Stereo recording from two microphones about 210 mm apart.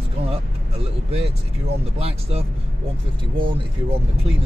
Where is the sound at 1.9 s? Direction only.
30° right (ahead or behind).